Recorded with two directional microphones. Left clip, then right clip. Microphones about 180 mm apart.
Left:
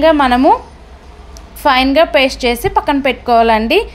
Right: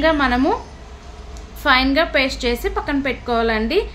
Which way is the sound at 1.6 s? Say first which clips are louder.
Left 6 dB; 40° left (ahead or behind).